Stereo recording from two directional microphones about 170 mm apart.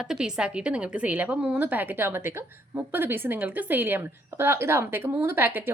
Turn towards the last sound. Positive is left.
turn(degrees=-10)  # may be behind; listen again after turning